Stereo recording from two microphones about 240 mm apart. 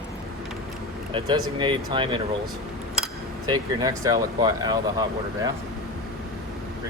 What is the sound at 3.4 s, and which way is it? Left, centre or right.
Speech, centre.